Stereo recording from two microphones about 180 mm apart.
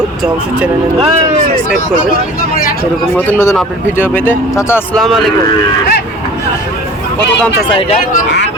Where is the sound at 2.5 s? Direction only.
55° left (ahead or behind).